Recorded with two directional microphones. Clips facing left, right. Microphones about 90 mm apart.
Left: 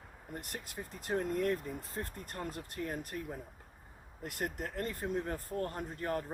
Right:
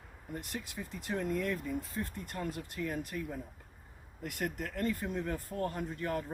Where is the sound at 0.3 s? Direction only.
40° left (ahead or behind).